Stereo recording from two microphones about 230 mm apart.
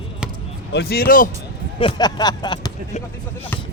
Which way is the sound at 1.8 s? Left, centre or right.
Centre.